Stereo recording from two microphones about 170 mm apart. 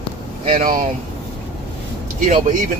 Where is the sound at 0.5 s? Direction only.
45° right (ahead or behind).